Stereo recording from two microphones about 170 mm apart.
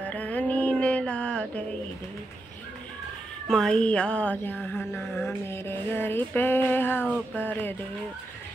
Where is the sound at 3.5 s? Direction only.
5° left (ahead or behind).